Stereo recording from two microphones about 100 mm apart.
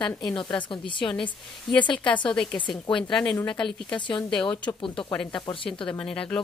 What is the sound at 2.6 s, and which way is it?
A woman's voice, 55° left (ahead or behind).